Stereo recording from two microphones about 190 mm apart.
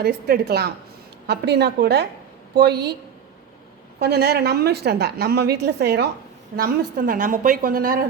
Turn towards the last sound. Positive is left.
turn(degrees=-50)  # may be behind; listen again after turning